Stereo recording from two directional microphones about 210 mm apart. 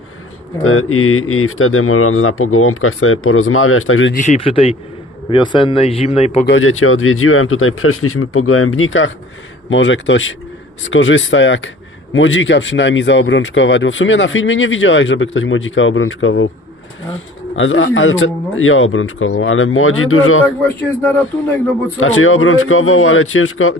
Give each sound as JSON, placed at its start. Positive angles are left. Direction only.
{"t": 0.6, "sound": "speech", "side_deg": 80}
{"t": 4.1, "sound": "speech", "side_deg": 35}
{"t": 6.4, "sound": "speech", "side_deg": 70}
{"t": 17.5, "sound": "speech", "side_deg": 65}
{"t": 20.6, "sound": "speech", "side_deg": 10}
{"t": 22.0, "sound": "speech", "side_deg": 75}